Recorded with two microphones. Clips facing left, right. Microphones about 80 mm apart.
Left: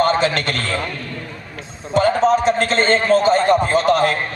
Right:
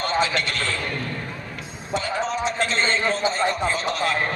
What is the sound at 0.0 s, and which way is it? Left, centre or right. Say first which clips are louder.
Speech: left 6 dB; left.